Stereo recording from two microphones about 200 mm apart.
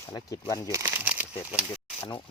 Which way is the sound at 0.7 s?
15° right (ahead or behind).